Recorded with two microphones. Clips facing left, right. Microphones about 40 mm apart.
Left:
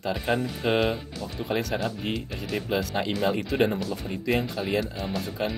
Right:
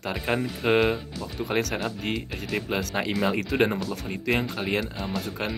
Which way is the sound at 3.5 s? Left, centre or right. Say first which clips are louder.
Even; right.